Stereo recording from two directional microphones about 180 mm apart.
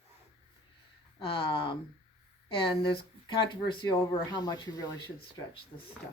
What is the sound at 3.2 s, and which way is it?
Speech, 25° left (ahead or behind).